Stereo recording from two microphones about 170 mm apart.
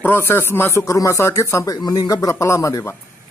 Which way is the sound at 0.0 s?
15° left (ahead or behind).